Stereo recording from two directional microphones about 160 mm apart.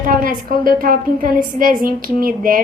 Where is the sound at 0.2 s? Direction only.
60° right (ahead or behind).